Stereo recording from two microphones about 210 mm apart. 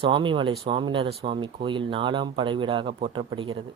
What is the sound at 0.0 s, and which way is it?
Speech, 25° right (ahead or behind).